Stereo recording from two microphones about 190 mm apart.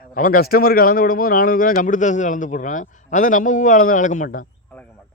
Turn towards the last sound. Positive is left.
turn(degrees=45)  # may be behind; listen again after turning